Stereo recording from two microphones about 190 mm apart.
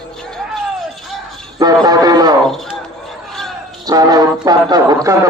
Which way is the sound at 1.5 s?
20° right (ahead or behind).